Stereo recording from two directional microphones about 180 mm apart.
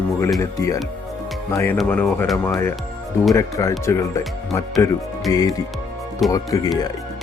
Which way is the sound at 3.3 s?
20° left (ahead or behind).